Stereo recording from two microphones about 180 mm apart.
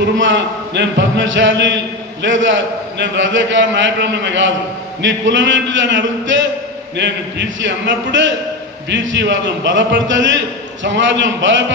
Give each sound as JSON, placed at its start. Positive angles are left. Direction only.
{"t": 0.0, "sound": "a man's voice", "side_deg": -80}